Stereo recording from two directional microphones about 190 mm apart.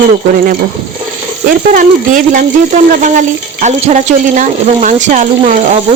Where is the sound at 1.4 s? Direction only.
45° right (ahead or behind).